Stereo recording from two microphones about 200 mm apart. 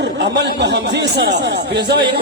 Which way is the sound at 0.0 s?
55° right (ahead or behind).